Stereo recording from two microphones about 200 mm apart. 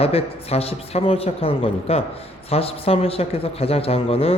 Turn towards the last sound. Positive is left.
turn(degrees=30)  # may be behind; listen again after turning